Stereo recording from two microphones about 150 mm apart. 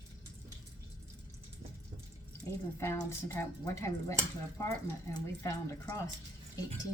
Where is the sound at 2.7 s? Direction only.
15° left (ahead or behind).